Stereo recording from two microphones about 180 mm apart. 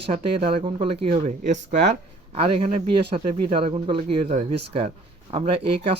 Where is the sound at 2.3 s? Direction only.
30° right (ahead or behind).